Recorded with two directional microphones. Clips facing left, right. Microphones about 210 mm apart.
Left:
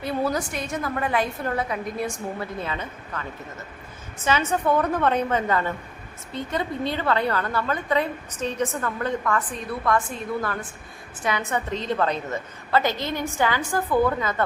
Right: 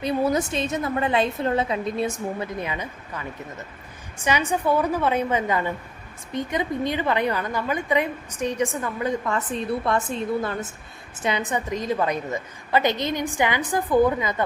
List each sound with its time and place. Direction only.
0.0 s a woman's voice: 20° right (ahead or behind)
9.2 s a woman's voice: 25° right (ahead or behind)